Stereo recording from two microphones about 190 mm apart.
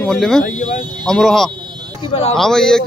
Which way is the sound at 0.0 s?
5° left (ahead or behind).